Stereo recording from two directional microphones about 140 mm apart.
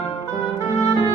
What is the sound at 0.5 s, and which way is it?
Music, 45° left (ahead or behind).